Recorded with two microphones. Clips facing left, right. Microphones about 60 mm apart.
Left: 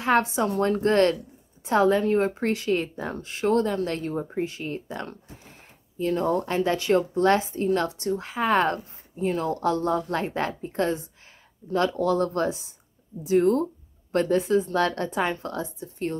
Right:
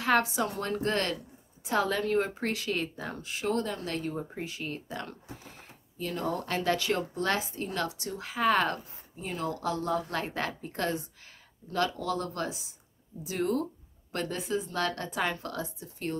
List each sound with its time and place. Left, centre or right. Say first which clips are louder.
0.0 s a woman's voice: left 4 dB; left